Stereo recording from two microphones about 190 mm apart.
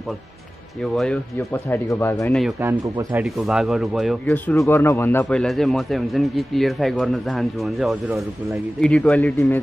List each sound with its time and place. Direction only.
0.9 s speech: 5° left (ahead or behind)
2.6 s speech: 10° right (ahead or behind); by 9.6 s 10° left (ahead or behind)